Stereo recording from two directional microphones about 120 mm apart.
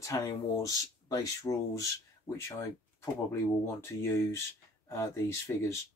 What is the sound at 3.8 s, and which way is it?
Speech, 20° left (ahead or behind).